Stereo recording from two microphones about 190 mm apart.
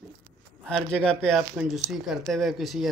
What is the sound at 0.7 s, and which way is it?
Speech, 5° left (ahead or behind).